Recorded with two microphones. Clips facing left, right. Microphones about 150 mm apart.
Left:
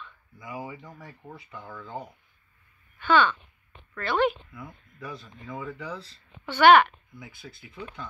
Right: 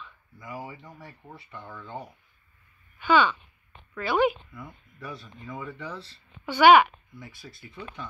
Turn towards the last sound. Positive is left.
turn(degrees=0)  # may be behind; listen again after turning